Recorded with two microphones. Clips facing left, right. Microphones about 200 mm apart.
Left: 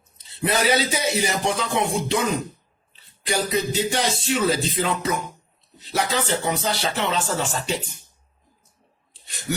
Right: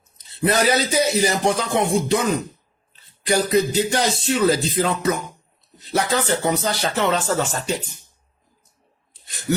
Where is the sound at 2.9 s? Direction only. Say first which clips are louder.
Right 5 dB; 45° right (ahead or behind).